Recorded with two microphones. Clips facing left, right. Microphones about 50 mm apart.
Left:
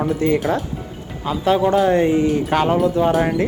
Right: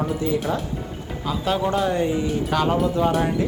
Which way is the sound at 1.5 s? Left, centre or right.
Centre.